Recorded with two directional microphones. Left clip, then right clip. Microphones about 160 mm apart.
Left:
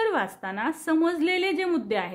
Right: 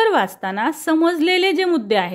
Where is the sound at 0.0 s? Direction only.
45° right (ahead or behind).